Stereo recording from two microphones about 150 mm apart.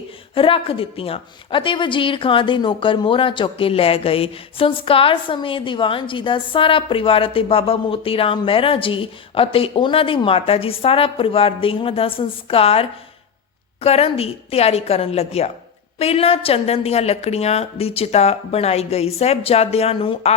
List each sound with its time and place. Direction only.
0.3 s a woman's voice: 35° left (ahead or behind)